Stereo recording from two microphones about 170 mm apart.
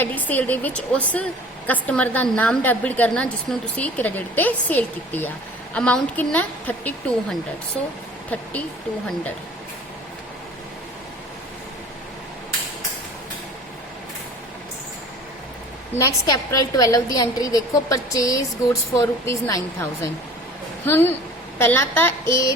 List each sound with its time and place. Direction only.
0.0 s a woman's voice: 10° left (ahead or behind)
16.0 s a woman's voice: 20° left (ahead or behind)